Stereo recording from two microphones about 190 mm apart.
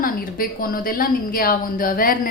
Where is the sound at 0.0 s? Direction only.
50° left (ahead or behind).